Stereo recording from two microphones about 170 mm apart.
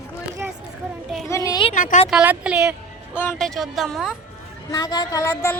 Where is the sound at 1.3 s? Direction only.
20° left (ahead or behind).